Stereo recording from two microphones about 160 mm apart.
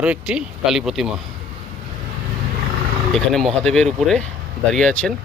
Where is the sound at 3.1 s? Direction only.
Centre (ahead or behind).